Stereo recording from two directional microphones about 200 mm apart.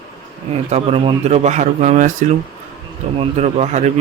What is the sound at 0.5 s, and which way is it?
Speech, 30° right (ahead or behind).